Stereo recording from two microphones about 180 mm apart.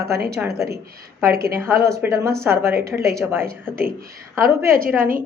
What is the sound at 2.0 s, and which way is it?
Speech, 15° right (ahead or behind).